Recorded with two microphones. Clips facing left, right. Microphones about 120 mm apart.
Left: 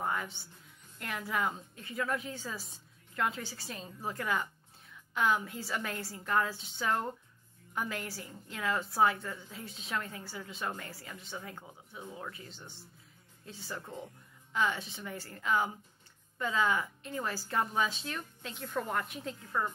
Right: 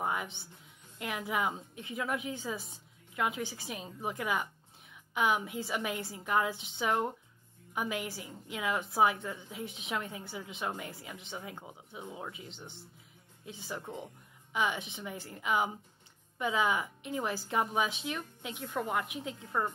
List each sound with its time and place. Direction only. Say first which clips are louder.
0.0 s music: right 1 dB; 15° right (ahead or behind)
0.9 s a woman's voice: right 1 dB; 15° right (ahead or behind)